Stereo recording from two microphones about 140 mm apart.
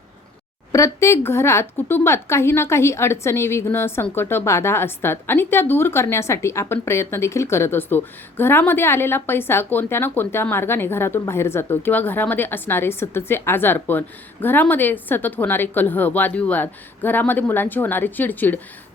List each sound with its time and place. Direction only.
0.7 s speech: 20° left (ahead or behind)